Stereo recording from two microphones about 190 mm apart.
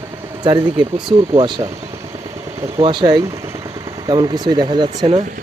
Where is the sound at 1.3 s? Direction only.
25° right (ahead or behind).